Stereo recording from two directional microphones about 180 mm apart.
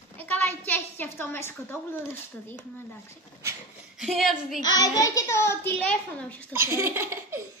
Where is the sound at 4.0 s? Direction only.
Centre (ahead or behind).